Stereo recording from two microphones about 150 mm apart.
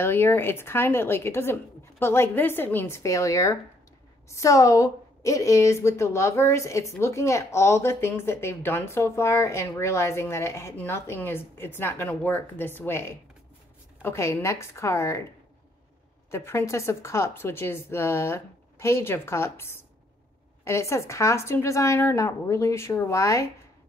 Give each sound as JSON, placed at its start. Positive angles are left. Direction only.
{"t": 0.0, "sound": "a woman's voice", "side_deg": 15}
{"t": 16.3, "sound": "a woman's voice", "side_deg": 15}